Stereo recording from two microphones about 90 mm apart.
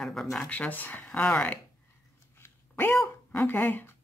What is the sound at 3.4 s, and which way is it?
Speech, 20° left (ahead or behind).